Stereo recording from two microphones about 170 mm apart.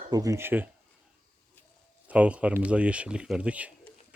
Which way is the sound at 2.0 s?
10° right (ahead or behind).